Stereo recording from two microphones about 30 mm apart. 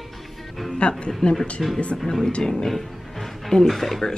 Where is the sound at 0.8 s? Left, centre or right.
Left.